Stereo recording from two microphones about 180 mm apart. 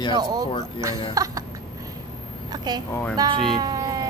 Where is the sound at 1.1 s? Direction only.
20° right (ahead or behind).